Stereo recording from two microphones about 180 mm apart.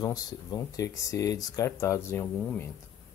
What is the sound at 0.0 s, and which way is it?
Speech, 20° left (ahead or behind).